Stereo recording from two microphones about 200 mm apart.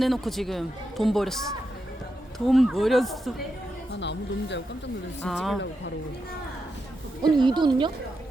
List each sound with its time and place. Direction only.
0.0 s a man's voice: centre (ahead or behind)
2.5 s a man's voice: centre (ahead or behind)
4.0 s speech: 60° left (ahead or behind)
5.2 s a man's voice: centre (ahead or behind)
7.2 s a woman's voice: 20° right (ahead or behind)